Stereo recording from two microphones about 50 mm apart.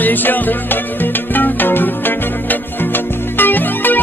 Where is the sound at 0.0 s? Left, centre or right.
Left.